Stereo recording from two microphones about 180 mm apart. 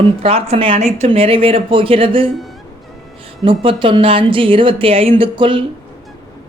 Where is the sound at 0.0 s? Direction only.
35° right (ahead or behind).